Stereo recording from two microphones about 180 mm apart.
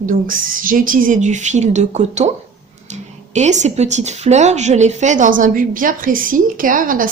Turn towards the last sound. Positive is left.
turn(degrees=-50)  # may be behind; listen again after turning